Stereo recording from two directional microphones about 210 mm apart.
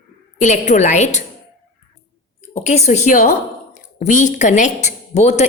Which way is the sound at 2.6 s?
35° left (ahead or behind).